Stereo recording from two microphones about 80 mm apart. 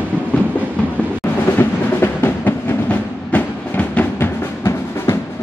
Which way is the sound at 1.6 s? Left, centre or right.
Left.